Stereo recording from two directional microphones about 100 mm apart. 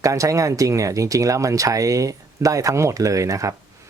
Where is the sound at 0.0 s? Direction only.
30° right (ahead or behind).